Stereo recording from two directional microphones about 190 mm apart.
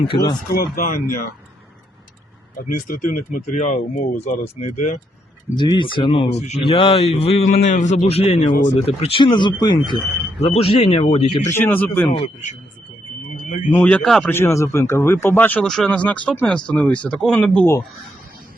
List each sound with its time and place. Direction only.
0.1 s speech: 25° left (ahead or behind)
0.5 s speech: 50° left (ahead or behind)
2.6 s speech: 50° left (ahead or behind)
5.5 s speech: 25° left (ahead or behind)
11.5 s speech: 10° left (ahead or behind)
12.1 s speech: 40° left (ahead or behind)
13.7 s speech: 5° left (ahead or behind)